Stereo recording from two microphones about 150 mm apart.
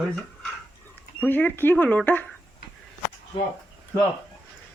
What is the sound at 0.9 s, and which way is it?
Speech, 10° left (ahead or behind).